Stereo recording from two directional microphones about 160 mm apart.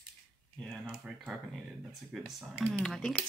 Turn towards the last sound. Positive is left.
turn(degrees=5)  # may be behind; listen again after turning